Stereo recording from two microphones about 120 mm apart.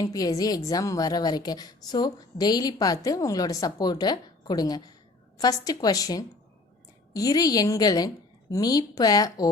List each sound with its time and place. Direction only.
0.0 s a woman's voice: 30° left (ahead or behind)